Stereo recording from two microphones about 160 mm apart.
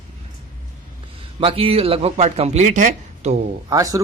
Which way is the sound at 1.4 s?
35° right (ahead or behind).